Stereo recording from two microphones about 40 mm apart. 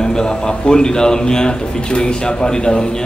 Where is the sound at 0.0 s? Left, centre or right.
Centre.